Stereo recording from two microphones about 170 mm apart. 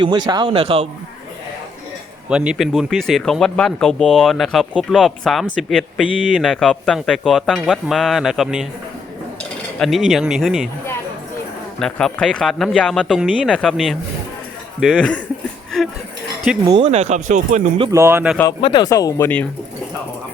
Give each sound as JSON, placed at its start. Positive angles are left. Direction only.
{"t": 0.3, "sound": "speech", "side_deg": -25}
{"t": 2.3, "sound": "speech", "side_deg": -5}
{"t": 9.7, "sound": "speech", "side_deg": 0}
{"t": 11.8, "sound": "speech", "side_deg": 5}
{"t": 16.5, "sound": "speech", "side_deg": -5}
{"t": 16.8, "sound": "speech", "side_deg": -40}
{"t": 17.9, "sound": "speech", "side_deg": -15}
{"t": 18.6, "sound": "speech", "side_deg": 25}